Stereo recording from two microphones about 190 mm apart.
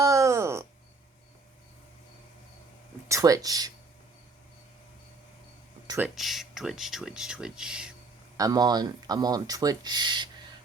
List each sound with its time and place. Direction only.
0.0 s a sound: 15° right (ahead or behind)
3.1 s speech: 20° right (ahead or behind)
6.0 s speech: centre (ahead or behind)
8.4 s speech: 20° right (ahead or behind)